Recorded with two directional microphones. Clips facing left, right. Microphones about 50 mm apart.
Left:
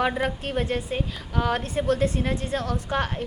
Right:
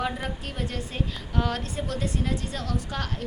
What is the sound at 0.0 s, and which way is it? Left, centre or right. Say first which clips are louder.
Speech: left 6 dB; left.